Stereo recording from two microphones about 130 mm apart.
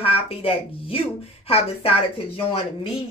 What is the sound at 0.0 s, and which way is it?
Speech, 45° left (ahead or behind).